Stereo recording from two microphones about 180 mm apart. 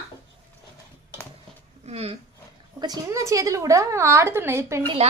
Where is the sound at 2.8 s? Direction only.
20° right (ahead or behind).